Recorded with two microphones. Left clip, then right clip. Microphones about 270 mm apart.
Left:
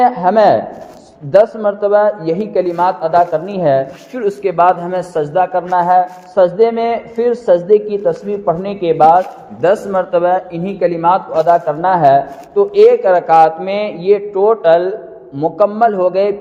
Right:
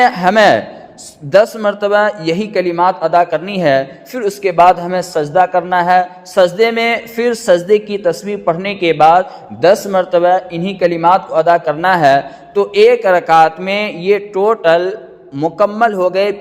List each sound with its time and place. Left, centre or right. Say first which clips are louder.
0.0 s a man's voice: right 1 dB; right